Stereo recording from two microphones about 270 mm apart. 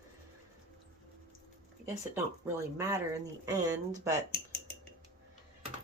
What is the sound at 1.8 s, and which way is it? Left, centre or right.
Speech, centre.